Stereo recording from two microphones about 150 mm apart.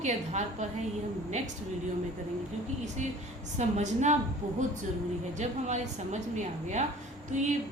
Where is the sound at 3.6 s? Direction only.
50° right (ahead or behind).